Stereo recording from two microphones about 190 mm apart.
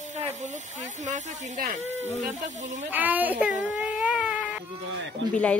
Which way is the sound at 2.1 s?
40° right (ahead or behind).